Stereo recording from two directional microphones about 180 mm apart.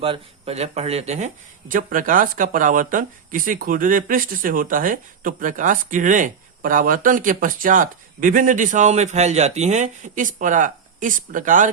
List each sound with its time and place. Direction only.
0.0 s speech: 30° right (ahead or behind)